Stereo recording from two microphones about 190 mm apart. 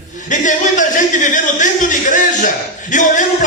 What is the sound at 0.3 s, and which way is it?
A man's voice, 40° left (ahead or behind).